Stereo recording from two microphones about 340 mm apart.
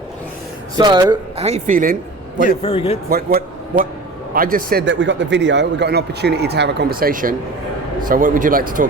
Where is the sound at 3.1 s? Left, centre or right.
Right.